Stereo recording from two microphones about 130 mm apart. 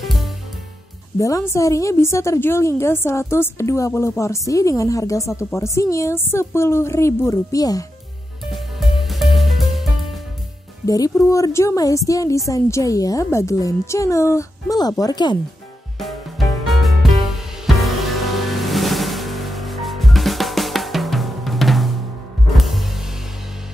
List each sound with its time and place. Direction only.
0.0 s music: centre (ahead or behind)
1.1 s a woman's voice: 25° left (ahead or behind)
8.5 s music: centre (ahead or behind)
10.9 s a woman's voice: 25° left (ahead or behind)
16.0 s music: centre (ahead or behind)